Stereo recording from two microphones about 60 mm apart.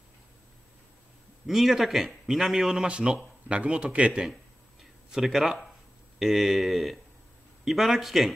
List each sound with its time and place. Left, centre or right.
1.5 s speech: centre
5.1 s speech: centre